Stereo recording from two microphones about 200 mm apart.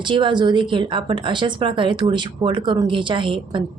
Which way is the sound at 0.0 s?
25° right (ahead or behind).